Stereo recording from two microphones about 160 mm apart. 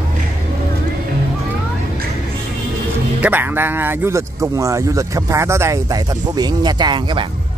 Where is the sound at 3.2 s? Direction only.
10° right (ahead or behind); by 7.3 s 30° right (ahead or behind).